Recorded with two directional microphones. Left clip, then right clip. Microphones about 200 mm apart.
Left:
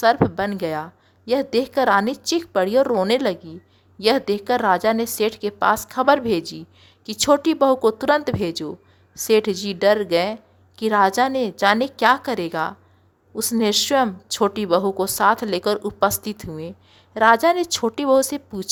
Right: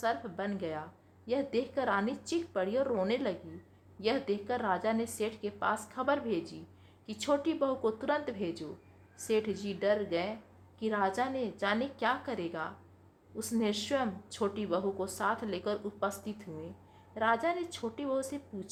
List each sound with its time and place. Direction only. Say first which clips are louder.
0.0 s a woman's voice: left 16 dB; 40° left (ahead or behind)